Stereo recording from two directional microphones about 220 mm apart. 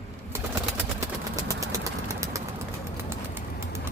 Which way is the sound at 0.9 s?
15° right (ahead or behind).